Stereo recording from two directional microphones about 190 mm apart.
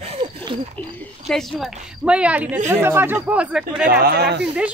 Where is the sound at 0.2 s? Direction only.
20° right (ahead or behind).